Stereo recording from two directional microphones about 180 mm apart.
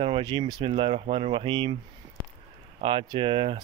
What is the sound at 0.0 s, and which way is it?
Speech, 30° right (ahead or behind).